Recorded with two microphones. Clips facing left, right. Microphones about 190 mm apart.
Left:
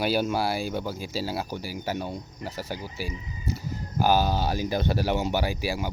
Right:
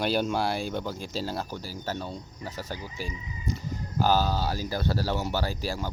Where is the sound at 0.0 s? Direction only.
5° left (ahead or behind).